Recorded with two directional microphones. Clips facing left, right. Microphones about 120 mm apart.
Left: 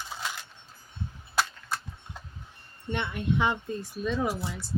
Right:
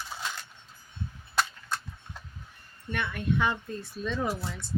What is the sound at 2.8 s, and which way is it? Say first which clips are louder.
Speech: left 1 dB; 20° left (ahead or behind).